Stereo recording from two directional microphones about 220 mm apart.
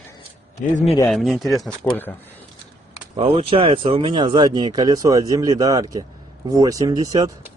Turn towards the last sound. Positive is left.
turn(degrees=-15)  # may be behind; listen again after turning